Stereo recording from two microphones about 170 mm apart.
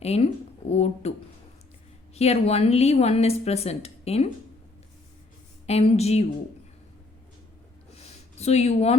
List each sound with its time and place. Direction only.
0.0 s a woman's voice: 40° left (ahead or behind)
2.1 s a woman's voice: 40° left (ahead or behind)
5.6 s a woman's voice: 40° left (ahead or behind)
7.9 s a sound: 40° left (ahead or behind)